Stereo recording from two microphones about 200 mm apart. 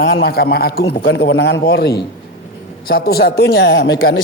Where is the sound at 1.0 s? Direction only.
65° left (ahead or behind).